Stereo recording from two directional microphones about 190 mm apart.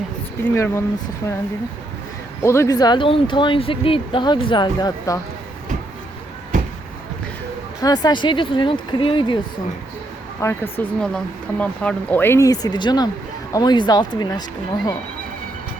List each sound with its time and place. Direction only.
0.4 s speech: 15° left (ahead or behind)
2.4 s speech: 15° left (ahead or behind)
7.8 s speech: 20° left (ahead or behind)
10.4 s speech: 10° left (ahead or behind)